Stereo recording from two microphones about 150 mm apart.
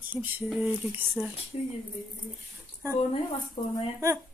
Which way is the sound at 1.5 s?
40° left (ahead or behind).